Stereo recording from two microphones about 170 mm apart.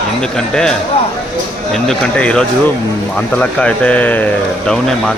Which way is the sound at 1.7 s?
5° left (ahead or behind).